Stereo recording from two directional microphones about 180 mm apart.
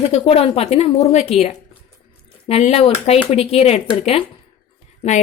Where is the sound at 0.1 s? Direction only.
35° left (ahead or behind).